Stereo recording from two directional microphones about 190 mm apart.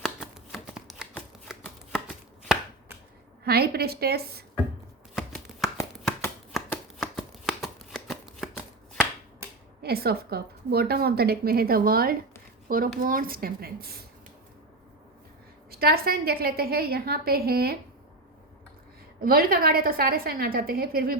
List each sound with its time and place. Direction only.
0.0 s shuffling cards: centre (ahead or behind)
1.9 s chopping: 5° right (ahead or behind)
3.4 s a woman's voice: 55° right (ahead or behind)
5.1 s shuffling cards: centre (ahead or behind)
6.7 s shuffling cards: 10° left (ahead or behind)
7.4 s shuffling cards: centre (ahead or behind)
9.8 s a woman's voice: 55° right (ahead or behind)
15.7 s a woman's voice: 55° right (ahead or behind)
19.2 s a woman's voice: 50° right (ahead or behind)